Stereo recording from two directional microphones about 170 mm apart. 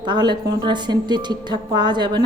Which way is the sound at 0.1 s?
25° right (ahead or behind).